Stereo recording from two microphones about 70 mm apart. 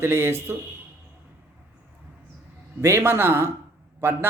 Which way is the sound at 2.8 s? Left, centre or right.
Right.